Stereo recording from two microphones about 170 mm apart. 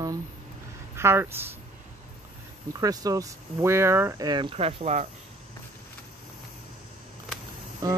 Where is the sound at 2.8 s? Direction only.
20° right (ahead or behind); by 5.0 s 40° right (ahead or behind).